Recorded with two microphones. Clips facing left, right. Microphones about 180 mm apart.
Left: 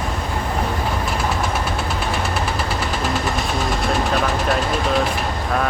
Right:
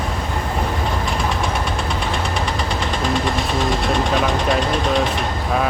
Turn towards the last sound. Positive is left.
turn(degrees=5)  # may be behind; listen again after turning